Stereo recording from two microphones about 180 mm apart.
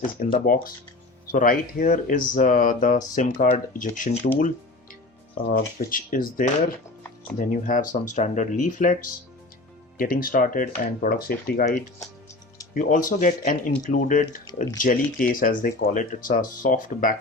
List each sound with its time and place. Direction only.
0.4 s speech: 55° left (ahead or behind)
5.5 s speech: 55° left (ahead or behind)
12.7 s speech: 45° left (ahead or behind)